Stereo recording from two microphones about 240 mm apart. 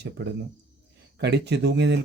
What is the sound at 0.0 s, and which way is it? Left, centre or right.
Speech, right.